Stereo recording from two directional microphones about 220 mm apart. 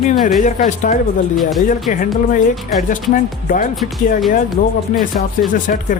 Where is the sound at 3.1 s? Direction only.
40° left (ahead or behind).